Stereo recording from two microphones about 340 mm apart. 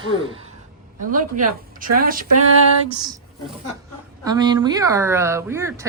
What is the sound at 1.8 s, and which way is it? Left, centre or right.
Speech, right.